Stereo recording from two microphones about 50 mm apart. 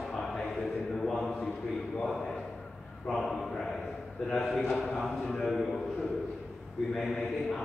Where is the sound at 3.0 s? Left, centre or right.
Centre.